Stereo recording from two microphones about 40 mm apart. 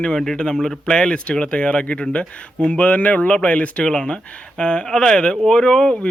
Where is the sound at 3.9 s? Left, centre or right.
Left.